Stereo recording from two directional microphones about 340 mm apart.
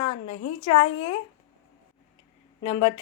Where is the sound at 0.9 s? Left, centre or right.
Left.